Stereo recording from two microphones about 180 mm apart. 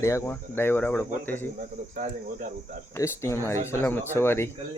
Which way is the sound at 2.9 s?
15° left (ahead or behind).